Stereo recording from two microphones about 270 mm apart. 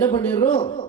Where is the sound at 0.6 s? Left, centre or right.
Centre.